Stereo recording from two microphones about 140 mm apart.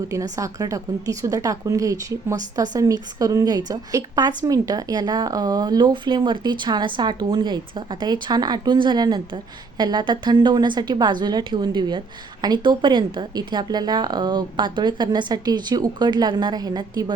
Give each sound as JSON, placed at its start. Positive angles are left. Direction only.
{"t": 0.1, "sound": "a woman's voice", "side_deg": -25}